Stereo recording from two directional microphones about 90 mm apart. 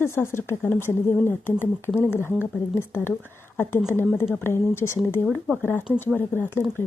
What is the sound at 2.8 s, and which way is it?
Speech, 25° left (ahead or behind).